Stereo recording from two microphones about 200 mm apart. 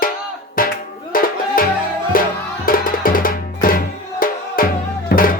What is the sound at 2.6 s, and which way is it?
Music, 45° left (ahead or behind).